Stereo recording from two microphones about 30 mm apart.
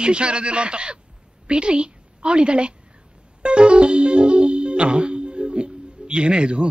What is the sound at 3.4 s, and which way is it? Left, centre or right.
Music, right.